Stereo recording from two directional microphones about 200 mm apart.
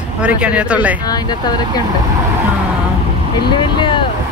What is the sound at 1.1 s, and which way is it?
Speech, 20° left (ahead or behind).